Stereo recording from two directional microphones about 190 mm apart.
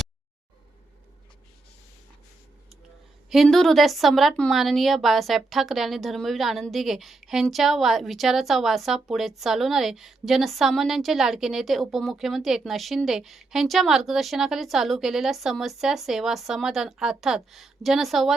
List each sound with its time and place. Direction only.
3.2 s a woman's voice: centre (ahead or behind)